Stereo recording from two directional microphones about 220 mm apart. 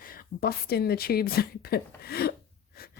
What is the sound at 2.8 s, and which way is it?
Wheeze, 40° left (ahead or behind).